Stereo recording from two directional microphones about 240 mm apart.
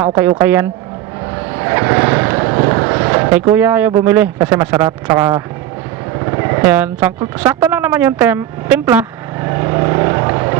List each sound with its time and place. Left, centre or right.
0.2 s speech: centre
8.9 s vehicle: centre